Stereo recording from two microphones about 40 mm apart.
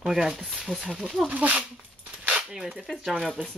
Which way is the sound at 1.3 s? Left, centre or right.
Right.